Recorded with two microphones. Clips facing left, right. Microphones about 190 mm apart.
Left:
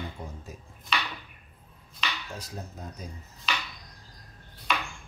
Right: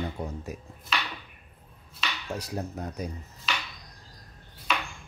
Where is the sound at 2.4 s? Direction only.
70° right (ahead or behind).